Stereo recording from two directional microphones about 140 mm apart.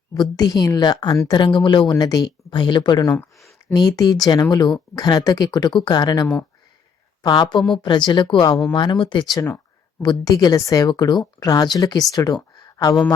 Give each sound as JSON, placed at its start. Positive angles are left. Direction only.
{"t": 0.1, "sound": "speech", "side_deg": 30}